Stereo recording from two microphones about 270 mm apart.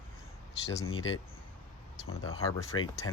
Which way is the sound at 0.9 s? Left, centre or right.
Left.